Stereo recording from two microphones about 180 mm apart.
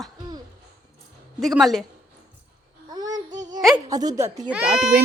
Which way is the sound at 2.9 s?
20° right (ahead or behind).